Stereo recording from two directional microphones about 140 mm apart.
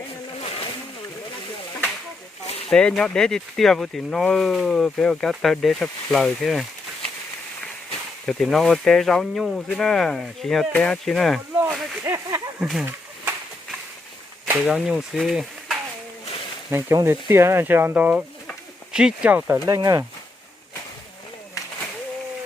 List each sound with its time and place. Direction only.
2.6 s speech: 5° left (ahead or behind)
8.3 s speech: centre (ahead or behind)
11.5 s speech: 15° right (ahead or behind)
12.5 s speech: 5° right (ahead or behind)
14.4 s speech: 10° right (ahead or behind)
16.7 s speech: 20° right (ahead or behind)
19.6 s speech: 25° right (ahead or behind)